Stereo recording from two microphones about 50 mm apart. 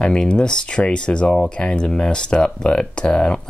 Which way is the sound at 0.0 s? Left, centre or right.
Centre.